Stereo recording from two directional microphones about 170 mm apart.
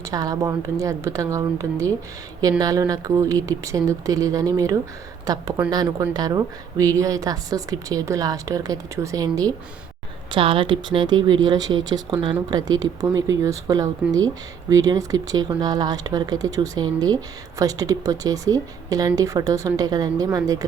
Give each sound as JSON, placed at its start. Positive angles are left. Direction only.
{"t": 0.0, "sound": "speech", "side_deg": -20}